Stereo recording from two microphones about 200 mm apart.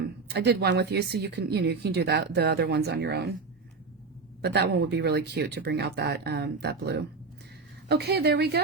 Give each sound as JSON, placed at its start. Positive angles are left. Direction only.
{"t": 0.3, "sound": "speech", "side_deg": -55}
{"t": 4.4, "sound": "speech", "side_deg": -55}